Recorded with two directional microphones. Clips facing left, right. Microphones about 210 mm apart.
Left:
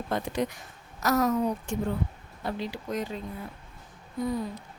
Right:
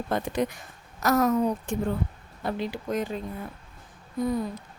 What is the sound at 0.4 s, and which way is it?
A woman's voice, 50° right (ahead or behind).